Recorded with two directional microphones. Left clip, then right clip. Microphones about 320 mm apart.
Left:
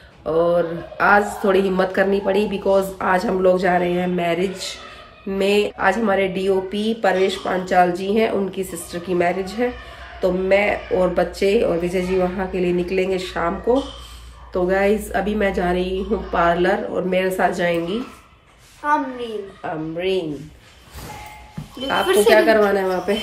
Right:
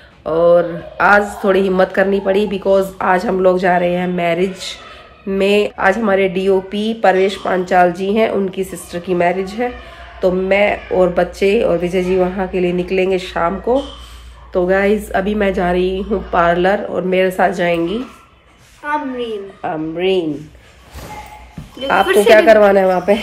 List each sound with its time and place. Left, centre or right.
0.2 s speech: centre
14.5 s speech: centre
18.8 s a woman's voice: centre
19.6 s a woman's voice: right
21.9 s a woman's voice: centre